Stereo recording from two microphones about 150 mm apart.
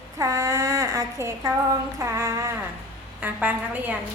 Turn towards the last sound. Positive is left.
turn(degrees=-10)  # may be behind; listen again after turning